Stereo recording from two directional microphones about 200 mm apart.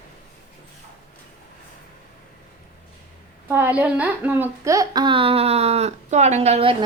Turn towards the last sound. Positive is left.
turn(degrees=-30)  # may be behind; listen again after turning